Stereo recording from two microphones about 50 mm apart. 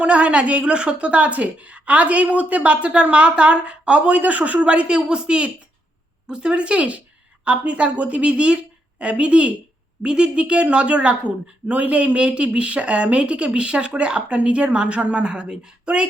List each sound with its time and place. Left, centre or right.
0.0 s a woman's voice: right